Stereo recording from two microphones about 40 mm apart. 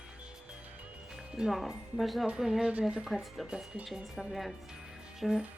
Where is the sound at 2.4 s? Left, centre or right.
Centre.